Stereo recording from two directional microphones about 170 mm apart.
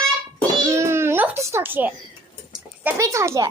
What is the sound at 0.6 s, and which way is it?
Babbling, 15° right (ahead or behind).